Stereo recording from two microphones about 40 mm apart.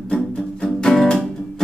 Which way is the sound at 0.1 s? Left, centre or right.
Centre.